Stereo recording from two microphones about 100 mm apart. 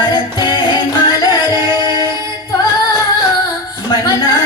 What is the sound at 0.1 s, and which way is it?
Music, 50° left (ahead or behind).